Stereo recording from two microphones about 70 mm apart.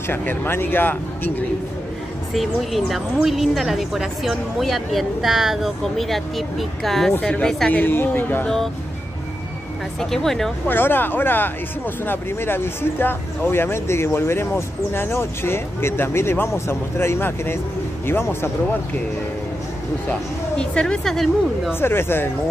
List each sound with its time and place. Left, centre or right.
0.1 s speech: left
2.3 s a woman's voice: centre
7.7 s a woman's voice: left
9.9 s a woman's voice: centre
10.7 s speech: left
20.1 s speech: centre
21.7 s speech: left